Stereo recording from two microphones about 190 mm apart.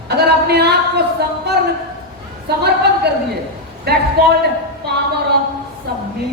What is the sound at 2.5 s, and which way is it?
Speech, 55° right (ahead or behind).